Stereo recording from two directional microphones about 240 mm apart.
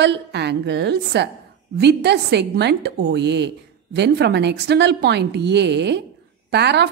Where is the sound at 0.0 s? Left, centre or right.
Right.